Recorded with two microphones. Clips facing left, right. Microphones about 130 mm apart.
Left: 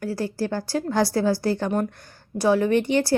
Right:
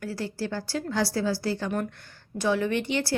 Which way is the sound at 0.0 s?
40° left (ahead or behind).